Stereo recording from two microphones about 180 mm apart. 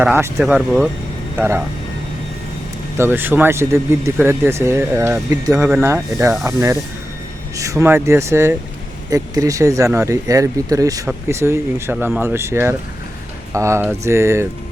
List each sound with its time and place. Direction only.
0.0 s speech: 10° right (ahead or behind)
0.3 s speech: centre (ahead or behind)
1.4 s speech: 15° right (ahead or behind)
3.0 s speech: 10° right (ahead or behind)